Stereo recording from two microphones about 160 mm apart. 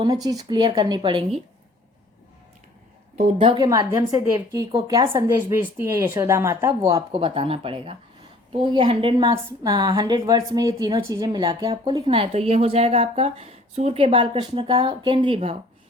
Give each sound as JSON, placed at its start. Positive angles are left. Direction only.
{"t": 0.3, "sound": "a woman's voice", "side_deg": -25}
{"t": 3.2, "sound": "a woman's voice", "side_deg": -35}
{"t": 3.7, "sound": "a woman's voice", "side_deg": -25}
{"t": 7.1, "sound": "a woman's voice", "side_deg": -35}
{"t": 12.0, "sound": "a woman's voice", "side_deg": -40}